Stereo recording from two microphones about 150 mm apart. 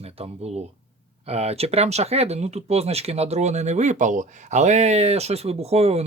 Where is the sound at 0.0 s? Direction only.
40° right (ahead or behind).